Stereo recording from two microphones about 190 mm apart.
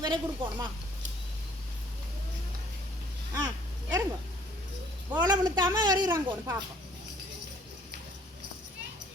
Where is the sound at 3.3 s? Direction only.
20° right (ahead or behind).